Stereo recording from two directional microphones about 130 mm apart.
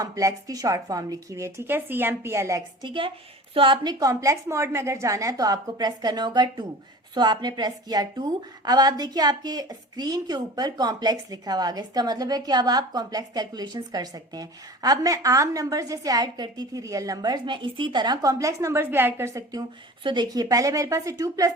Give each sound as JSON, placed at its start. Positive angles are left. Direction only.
{"t": 0.0, "sound": "a woman's voice", "side_deg": -25}
{"t": 2.8, "sound": "a woman's voice", "side_deg": -40}
{"t": 4.0, "sound": "a woman's voice", "side_deg": -25}